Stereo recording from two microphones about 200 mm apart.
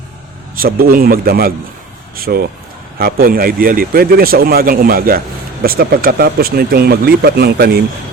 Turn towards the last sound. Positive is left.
turn(degrees=-50)  # may be behind; listen again after turning